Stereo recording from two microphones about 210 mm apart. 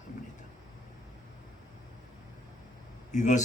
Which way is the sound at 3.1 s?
35° left (ahead or behind).